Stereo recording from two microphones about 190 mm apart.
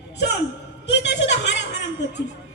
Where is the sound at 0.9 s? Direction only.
65° left (ahead or behind).